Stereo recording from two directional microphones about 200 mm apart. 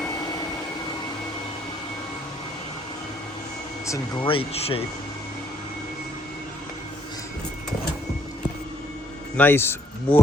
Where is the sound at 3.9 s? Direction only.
20° left (ahead or behind).